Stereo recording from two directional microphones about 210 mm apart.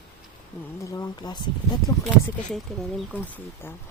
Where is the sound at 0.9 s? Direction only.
15° left (ahead or behind).